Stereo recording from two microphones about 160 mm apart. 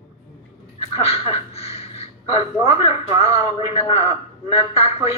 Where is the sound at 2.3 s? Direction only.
40° left (ahead or behind).